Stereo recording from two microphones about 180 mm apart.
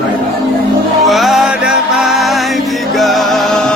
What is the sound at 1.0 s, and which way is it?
Music, centre (ahead or behind).